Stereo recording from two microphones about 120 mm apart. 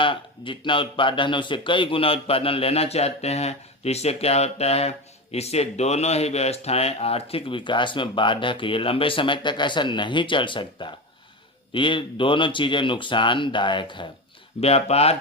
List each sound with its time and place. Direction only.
0.0 s speech: 45° left (ahead or behind)
14.6 s speech: 60° left (ahead or behind)